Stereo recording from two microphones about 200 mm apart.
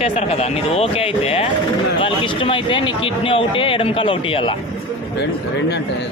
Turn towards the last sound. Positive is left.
turn(degrees=25)  # may be behind; listen again after turning